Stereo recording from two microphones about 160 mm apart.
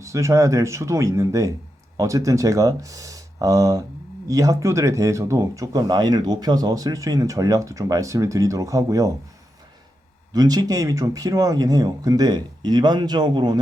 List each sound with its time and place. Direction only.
0.0 s speech: 20° right (ahead or behind)
10.3 s speech: 25° right (ahead or behind)